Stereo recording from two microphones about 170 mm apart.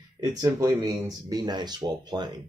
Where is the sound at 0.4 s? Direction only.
20° right (ahead or behind).